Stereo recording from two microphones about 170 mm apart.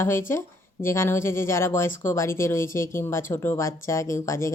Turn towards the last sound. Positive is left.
turn(degrees=15)  # may be behind; listen again after turning